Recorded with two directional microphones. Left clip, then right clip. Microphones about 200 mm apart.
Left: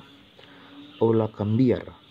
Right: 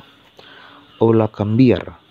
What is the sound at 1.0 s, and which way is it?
Speech, 15° right (ahead or behind).